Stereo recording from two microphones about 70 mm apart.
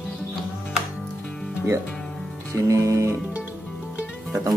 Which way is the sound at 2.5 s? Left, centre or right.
Right.